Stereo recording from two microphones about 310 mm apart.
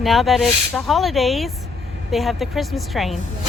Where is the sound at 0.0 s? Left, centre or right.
Centre.